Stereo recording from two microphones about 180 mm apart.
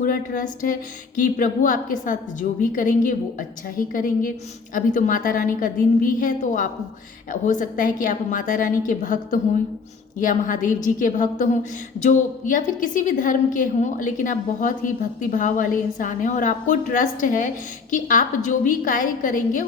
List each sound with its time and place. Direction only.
0.0 s a woman's voice: 50° left (ahead or behind)